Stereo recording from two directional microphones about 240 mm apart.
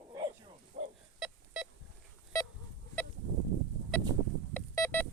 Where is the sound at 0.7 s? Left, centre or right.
Right.